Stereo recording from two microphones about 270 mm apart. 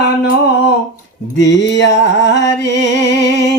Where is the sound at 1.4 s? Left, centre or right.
Left.